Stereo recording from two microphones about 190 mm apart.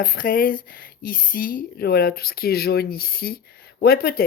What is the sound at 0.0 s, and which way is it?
Speech, 50° left (ahead or behind).